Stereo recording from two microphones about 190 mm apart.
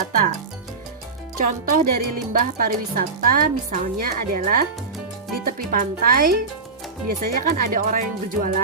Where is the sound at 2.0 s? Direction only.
45° right (ahead or behind).